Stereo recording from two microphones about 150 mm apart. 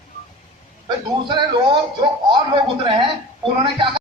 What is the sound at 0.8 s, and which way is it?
Speech, 30° right (ahead or behind).